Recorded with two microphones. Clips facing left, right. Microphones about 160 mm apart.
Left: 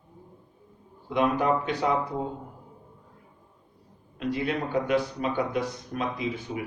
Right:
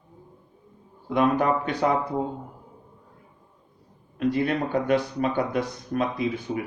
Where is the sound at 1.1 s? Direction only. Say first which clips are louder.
Right 2 dB; 50° right (ahead or behind).